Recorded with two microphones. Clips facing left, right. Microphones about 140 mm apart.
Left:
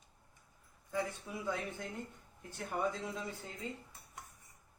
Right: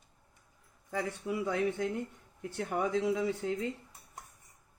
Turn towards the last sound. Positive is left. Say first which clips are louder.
# right 12 dB
turn(degrees=-80)